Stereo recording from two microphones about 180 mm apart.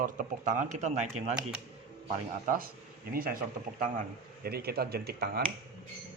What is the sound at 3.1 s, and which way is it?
Speech, 55° right (ahead or behind).